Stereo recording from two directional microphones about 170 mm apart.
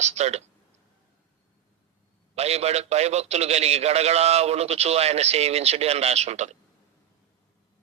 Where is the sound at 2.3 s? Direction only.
40° right (ahead or behind).